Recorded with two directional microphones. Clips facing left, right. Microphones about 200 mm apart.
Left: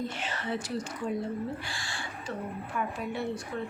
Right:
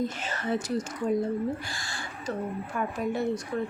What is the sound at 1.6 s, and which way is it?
Speech, 40° right (ahead or behind).